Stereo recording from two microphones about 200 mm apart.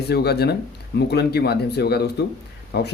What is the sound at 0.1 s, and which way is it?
Speech, 55° left (ahead or behind).